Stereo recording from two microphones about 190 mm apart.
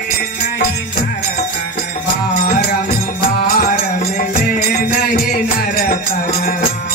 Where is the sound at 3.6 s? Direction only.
50° left (ahead or behind).